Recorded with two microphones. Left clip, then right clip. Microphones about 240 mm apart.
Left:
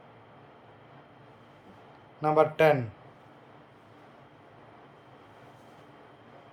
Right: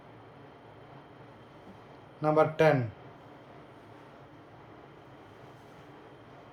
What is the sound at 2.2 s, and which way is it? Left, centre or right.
Speech, centre.